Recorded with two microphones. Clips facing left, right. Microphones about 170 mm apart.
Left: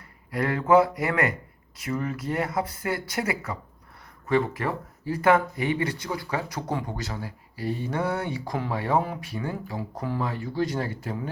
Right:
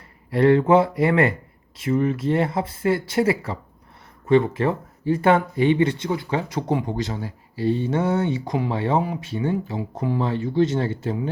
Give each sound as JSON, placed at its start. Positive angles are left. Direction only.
{"t": 0.3, "sound": "speech", "side_deg": -30}